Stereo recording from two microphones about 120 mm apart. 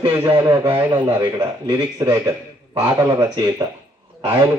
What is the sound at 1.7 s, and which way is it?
Speech, 25° right (ahead or behind).